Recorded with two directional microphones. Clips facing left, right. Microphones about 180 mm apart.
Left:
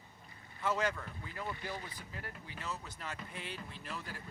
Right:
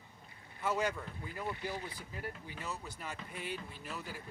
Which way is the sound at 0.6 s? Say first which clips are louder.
Even; 10° right (ahead or behind).